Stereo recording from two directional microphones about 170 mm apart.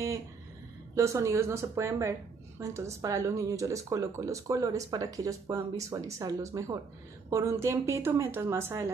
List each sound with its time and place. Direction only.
0.9 s speech: 15° right (ahead or behind)